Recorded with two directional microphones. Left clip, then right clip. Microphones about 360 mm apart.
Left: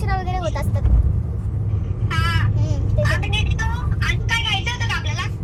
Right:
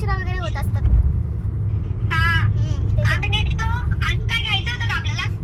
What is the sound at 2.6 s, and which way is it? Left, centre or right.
Vehicle, centre.